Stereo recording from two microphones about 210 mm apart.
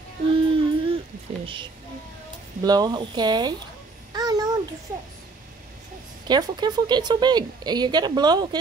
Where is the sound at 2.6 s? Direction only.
20° right (ahead or behind).